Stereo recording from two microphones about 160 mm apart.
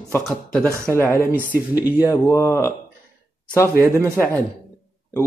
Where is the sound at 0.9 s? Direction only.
15° left (ahead or behind).